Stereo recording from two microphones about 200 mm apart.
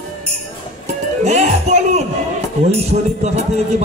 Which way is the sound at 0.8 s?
35° right (ahead or behind).